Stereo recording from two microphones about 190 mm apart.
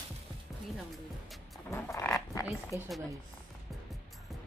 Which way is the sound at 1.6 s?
15° left (ahead or behind).